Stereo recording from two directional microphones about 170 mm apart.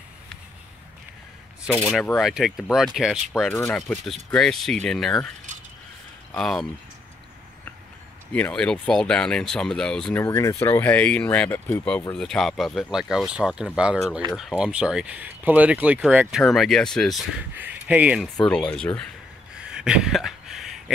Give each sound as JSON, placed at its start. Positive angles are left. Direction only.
{"t": 1.7, "sound": "speech", "side_deg": 5}
{"t": 3.5, "sound": "speech", "side_deg": 10}
{"t": 6.3, "sound": "speech", "side_deg": 0}
{"t": 8.3, "sound": "speech", "side_deg": 10}
{"t": 10.2, "sound": "speech", "side_deg": 20}
{"t": 17.4, "sound": "speech", "side_deg": -10}
{"t": 19.5, "sound": "a sound", "side_deg": -5}